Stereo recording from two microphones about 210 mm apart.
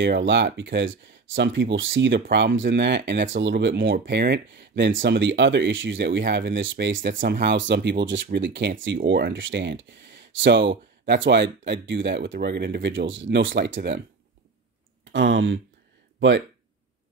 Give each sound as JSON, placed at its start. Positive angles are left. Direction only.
{"t": 0.0, "sound": "speech", "side_deg": -55}
{"t": 7.0, "sound": "speech", "side_deg": -55}
{"t": 15.1, "sound": "speech", "side_deg": -60}